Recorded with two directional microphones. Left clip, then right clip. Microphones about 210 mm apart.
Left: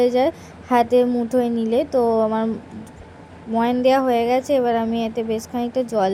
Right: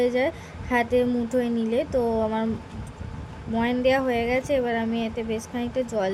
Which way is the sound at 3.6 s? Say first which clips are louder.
Left 5 dB; 15° left (ahead or behind).